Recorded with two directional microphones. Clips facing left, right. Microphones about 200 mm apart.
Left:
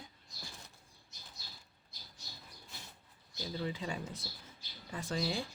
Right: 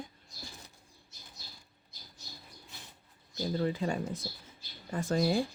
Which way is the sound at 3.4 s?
50° right (ahead or behind).